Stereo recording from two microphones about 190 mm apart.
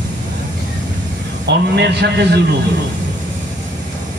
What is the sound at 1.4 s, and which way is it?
A man's voice, 60° right (ahead or behind).